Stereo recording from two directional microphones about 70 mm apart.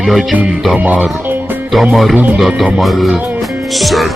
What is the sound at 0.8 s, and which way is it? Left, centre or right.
Speech, right.